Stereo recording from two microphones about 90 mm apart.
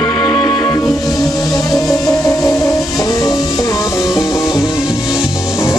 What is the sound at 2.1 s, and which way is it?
Music, 40° left (ahead or behind).